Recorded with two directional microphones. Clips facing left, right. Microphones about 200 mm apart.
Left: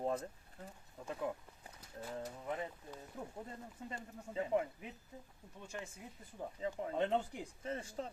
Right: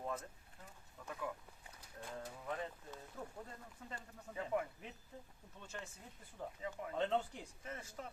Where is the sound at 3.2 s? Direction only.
10° left (ahead or behind).